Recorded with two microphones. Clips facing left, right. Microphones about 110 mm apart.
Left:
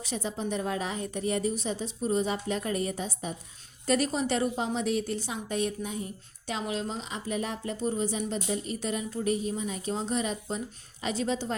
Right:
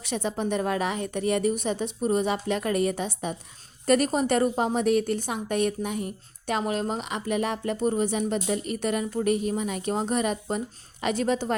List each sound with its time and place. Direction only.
0.0 s a woman's voice: 65° right (ahead or behind)
3.8 s speech: 50° right (ahead or behind)
6.5 s speech: 55° right (ahead or behind)